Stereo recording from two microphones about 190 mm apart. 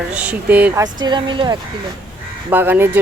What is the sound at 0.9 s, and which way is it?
Speech, 25° right (ahead or behind).